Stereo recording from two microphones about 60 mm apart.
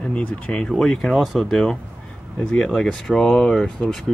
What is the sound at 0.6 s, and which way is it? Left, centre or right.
Speech, centre.